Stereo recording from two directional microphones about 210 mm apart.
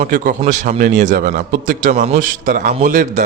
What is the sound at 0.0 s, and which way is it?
A man's voice, 40° right (ahead or behind).